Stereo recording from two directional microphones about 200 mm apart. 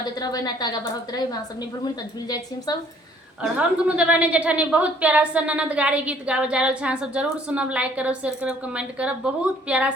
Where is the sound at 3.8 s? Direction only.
5° right (ahead or behind).